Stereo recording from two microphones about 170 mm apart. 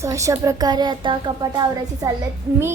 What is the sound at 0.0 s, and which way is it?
A woman's voice, 15° right (ahead or behind).